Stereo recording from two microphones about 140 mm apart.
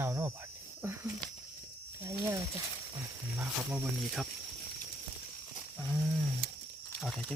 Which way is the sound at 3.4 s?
10° right (ahead or behind).